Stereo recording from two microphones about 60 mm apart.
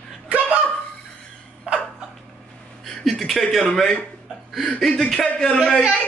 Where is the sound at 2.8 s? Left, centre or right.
Centre.